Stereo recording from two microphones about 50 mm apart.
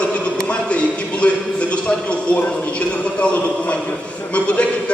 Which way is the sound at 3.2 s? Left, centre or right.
Left.